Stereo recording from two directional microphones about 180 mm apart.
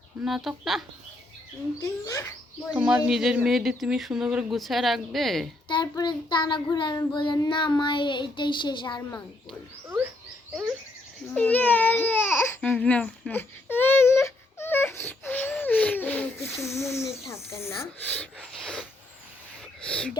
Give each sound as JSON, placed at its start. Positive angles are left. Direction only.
{"t": 0.3, "sound": "speech", "side_deg": 0}
{"t": 1.8, "sound": "speech", "side_deg": 20}
{"t": 2.7, "sound": "speech", "side_deg": -5}
{"t": 5.6, "sound": "child singing", "side_deg": 25}
{"t": 11.3, "sound": "speech", "side_deg": 10}
{"t": 14.2, "sound": "a sound", "side_deg": 15}
{"t": 16.6, "sound": "speech", "side_deg": 15}